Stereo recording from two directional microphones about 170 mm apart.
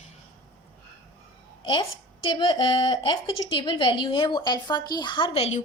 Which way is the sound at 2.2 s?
25° left (ahead or behind).